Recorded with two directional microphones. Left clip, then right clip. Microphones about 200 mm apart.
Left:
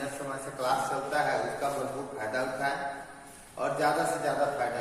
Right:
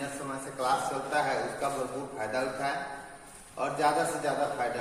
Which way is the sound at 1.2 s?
15° right (ahead or behind).